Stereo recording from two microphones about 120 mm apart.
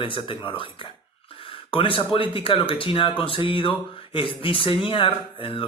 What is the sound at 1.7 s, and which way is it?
A man's voice, 45° left (ahead or behind).